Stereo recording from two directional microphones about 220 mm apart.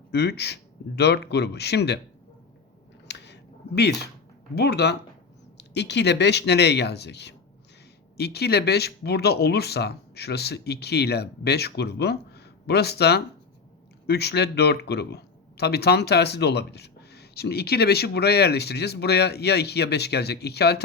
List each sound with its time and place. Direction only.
0.1 s speech: 50° left (ahead or behind)
3.1 s a sound: 50° left (ahead or behind)
4.5 s speech: 45° left (ahead or behind)